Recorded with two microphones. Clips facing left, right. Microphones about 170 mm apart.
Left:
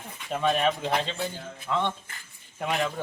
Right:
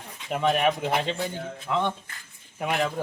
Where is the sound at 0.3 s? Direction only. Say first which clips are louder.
Right 2 dB; 15° right (ahead or behind).